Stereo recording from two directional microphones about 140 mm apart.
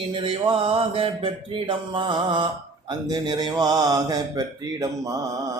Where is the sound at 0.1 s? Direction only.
40° right (ahead or behind).